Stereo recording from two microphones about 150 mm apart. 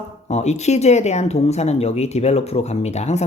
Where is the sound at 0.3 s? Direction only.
50° left (ahead or behind).